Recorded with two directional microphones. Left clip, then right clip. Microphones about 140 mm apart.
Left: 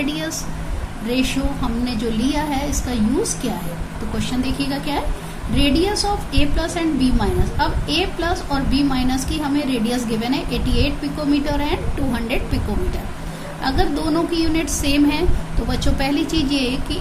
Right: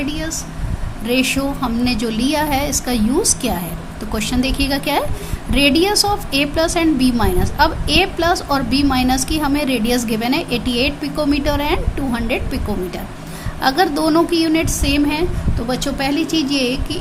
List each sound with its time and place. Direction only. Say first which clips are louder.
0.0 s a woman's voice: even; 15° right (ahead or behind)
1.0 s a woman's voice: right 4 dB; 50° right (ahead or behind)
4.3 s a woman's voice: right 5 dB; 50° right (ahead or behind); by 12.5 s 35° right (ahead or behind)
13.6 s a woman's voice: right 6 dB; 50° right (ahead or behind)